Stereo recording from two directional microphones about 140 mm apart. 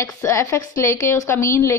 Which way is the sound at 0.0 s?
20° left (ahead or behind).